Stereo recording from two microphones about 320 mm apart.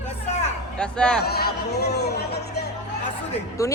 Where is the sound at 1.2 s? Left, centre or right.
Left.